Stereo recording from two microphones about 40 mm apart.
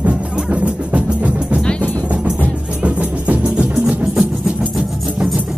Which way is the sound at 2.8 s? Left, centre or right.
Right.